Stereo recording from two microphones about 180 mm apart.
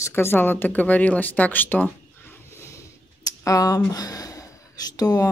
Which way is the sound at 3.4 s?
20° left (ahead or behind).